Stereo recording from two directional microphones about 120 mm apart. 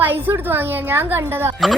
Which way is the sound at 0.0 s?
15° right (ahead or behind).